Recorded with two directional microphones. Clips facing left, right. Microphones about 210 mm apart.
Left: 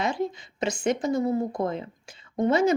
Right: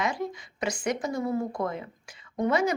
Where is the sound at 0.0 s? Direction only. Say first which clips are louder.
Left 3 dB; 25° left (ahead or behind).